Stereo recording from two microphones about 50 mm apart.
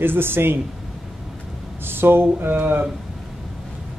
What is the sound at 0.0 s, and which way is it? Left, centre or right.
Speech, right.